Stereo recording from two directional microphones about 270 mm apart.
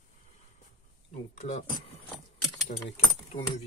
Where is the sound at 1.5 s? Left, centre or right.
Left.